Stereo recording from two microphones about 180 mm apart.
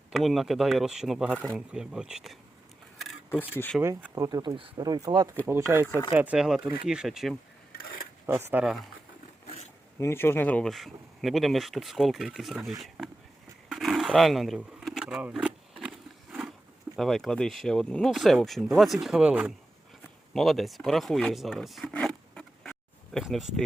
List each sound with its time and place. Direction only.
0.1 s speech: centre (ahead or behind)
3.5 s speech: 10° left (ahead or behind)
3.8 s speech: 15° right (ahead or behind)
8.3 s speech: 15° right (ahead or behind)
10.0 s speech: 15° left (ahead or behind)
13.7 s a sound: centre (ahead or behind)
16.9 s speech: centre (ahead or behind)